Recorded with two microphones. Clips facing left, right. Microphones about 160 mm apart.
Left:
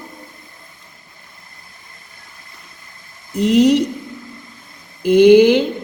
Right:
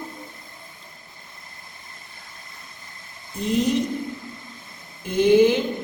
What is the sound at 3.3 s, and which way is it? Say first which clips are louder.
Speech: left 9 dB; 75° left (ahead or behind).